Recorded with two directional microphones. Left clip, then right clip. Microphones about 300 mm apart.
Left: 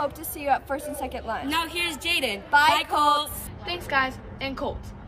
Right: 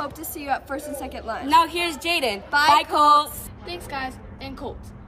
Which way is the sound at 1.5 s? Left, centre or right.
Centre.